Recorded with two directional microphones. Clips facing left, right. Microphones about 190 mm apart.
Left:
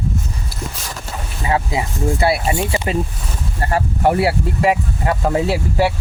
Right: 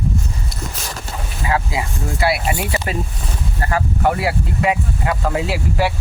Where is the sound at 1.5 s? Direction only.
25° left (ahead or behind).